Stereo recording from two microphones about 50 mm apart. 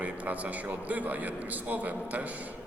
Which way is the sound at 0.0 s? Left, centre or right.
Right.